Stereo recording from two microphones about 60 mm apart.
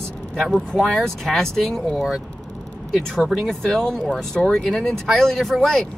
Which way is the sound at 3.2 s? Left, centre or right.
Centre.